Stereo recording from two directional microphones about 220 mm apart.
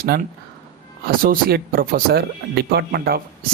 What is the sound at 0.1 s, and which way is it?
Speech, 45° right (ahead or behind).